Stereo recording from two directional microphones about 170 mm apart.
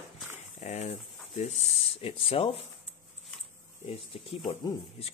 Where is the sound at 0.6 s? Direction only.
45° left (ahead or behind).